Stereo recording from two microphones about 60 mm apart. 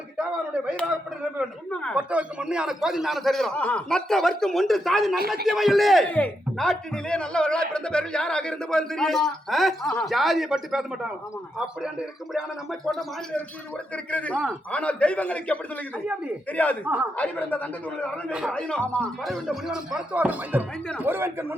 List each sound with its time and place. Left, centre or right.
1.7 s speech: centre
2.0 s a man's voice: centre
3.5 s speech: left
3.8 s a man's voice: centre
6.1 s speech: left
6.6 s a man's voice: centre
13.9 s speech: left
18.3 s a man's voice: centre
18.5 s speech: centre
19.2 s a man's voice: centre
20.1 s speech: right
21.0 s speech: right